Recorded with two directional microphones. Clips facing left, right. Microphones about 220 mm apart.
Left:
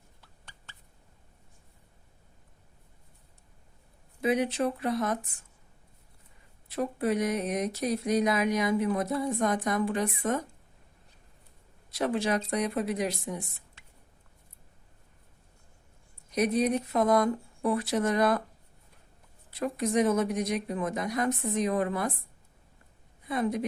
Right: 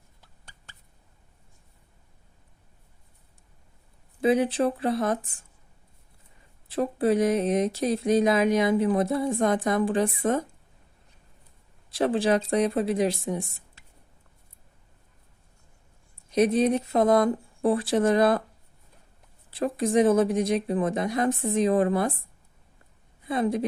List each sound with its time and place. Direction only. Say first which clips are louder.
0.4 s a sound: even; 40° right (ahead or behind)
4.2 s speech: right 5 dB; 30° right (ahead or behind)
6.7 s speech: right 5 dB; 30° right (ahead or behind)
11.9 s speech: right 5 dB; 30° right (ahead or behind)
16.3 s speech: right 5 dB; 30° right (ahead or behind)
19.5 s speech: right 4 dB; 30° right (ahead or behind)
23.3 s speech: right 4 dB; 30° right (ahead or behind)